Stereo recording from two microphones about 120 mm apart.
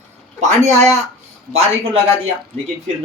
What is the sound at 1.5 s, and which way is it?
Speech, 60° right (ahead or behind).